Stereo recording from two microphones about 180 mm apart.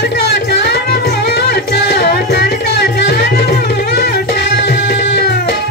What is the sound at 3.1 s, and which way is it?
Music, 65° left (ahead or behind).